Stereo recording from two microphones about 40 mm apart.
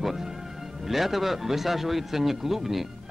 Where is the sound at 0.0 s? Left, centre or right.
Centre.